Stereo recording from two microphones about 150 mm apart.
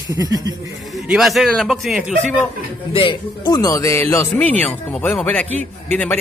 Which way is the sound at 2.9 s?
35° left (ahead or behind).